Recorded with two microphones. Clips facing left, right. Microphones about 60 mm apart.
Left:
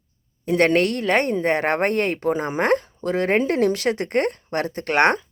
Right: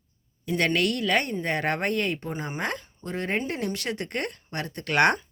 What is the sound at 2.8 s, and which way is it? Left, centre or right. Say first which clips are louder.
Speech: left 9 dB; left.